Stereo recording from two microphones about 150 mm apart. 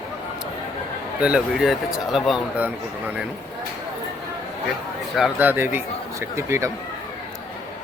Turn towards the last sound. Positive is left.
turn(degrees=-20)  # may be behind; listen again after turning